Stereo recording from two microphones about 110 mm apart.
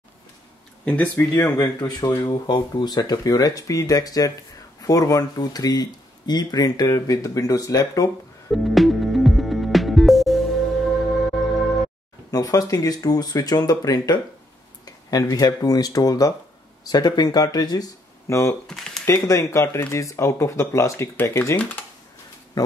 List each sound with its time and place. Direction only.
0.8 s speech: 15° left (ahead or behind)
1.3 s speech: 30° left (ahead or behind)
8.5 s music: centre (ahead or behind)
12.3 s speech: 35° left (ahead or behind)
18.7 s typewriter: 5° left (ahead or behind)
19.0 s speech: 25° left (ahead or behind)